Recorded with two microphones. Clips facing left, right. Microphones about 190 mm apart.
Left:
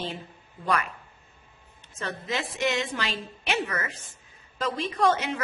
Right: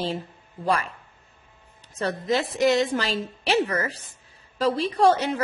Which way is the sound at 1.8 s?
35° right (ahead or behind).